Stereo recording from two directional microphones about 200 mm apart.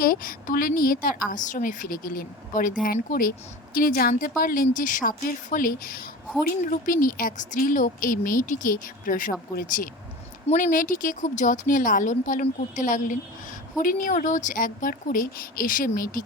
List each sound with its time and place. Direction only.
0.0 s speech: 45° left (ahead or behind)